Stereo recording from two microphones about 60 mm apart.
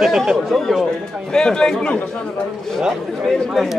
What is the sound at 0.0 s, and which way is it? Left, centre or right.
Speech, centre.